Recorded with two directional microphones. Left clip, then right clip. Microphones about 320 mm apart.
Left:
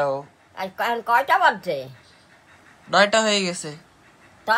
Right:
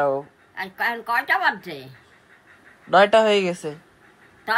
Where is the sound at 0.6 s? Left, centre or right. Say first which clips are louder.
Left 1 dB; centre.